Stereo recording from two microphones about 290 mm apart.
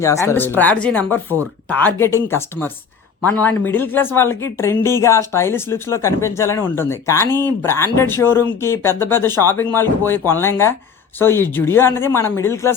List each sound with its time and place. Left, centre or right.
0.0 s speech: centre